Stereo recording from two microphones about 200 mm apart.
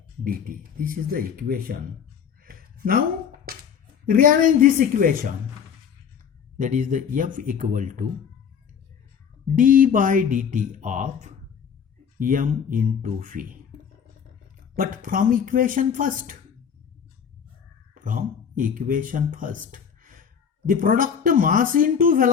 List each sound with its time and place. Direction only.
0.3 s speech: 45° right (ahead or behind)
2.4 s a sound: 45° right (ahead or behind)
3.4 s speech: 50° right (ahead or behind)
6.6 s speech: 40° right (ahead or behind)
9.6 s speech: 40° right (ahead or behind)
14.8 s speech: 45° right (ahead or behind)
18.0 s speech: 45° right (ahead or behind)